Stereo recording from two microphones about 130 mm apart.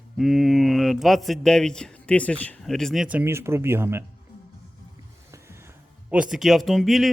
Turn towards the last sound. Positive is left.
turn(degrees=0)  # may be behind; listen again after turning